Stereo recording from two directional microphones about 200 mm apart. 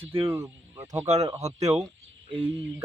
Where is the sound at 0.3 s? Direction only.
15° right (ahead or behind).